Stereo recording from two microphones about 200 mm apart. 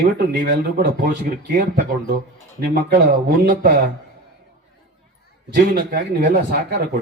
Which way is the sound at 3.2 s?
45° right (ahead or behind).